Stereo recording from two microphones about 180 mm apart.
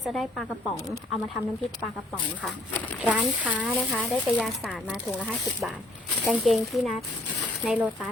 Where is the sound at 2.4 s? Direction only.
5° left (ahead or behind).